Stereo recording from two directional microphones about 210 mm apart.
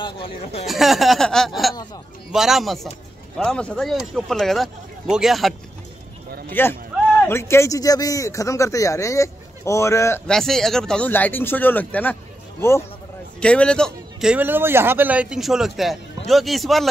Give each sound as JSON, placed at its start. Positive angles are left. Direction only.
{"t": 0.0, "sound": "speech", "side_deg": 25}
{"t": 0.7, "sound": "a man's voice", "side_deg": 0}
{"t": 6.5, "sound": "a man's voice", "side_deg": 10}